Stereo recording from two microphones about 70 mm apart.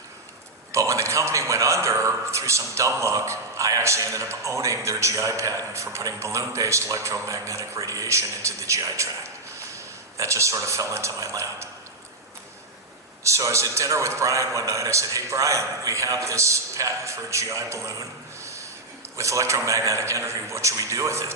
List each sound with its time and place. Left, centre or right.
0.7 s a man's voice: right
13.2 s a man's voice: right
18.4 s snort: right
19.1 s a man's voice: right